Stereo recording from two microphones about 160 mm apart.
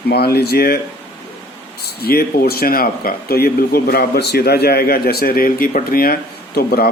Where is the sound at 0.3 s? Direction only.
80° left.